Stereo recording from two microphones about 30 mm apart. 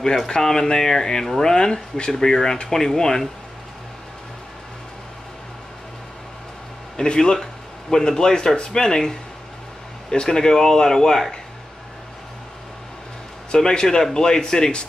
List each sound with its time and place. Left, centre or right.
0.3 s speech: centre
7.1 s speech: left
10.2 s speech: centre
13.5 s speech: left